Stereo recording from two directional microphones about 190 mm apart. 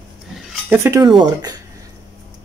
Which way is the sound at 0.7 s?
15° right (ahead or behind).